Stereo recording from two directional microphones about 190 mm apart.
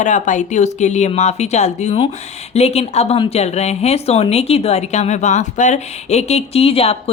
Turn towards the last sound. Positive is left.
turn(degrees=30)  # may be behind; listen again after turning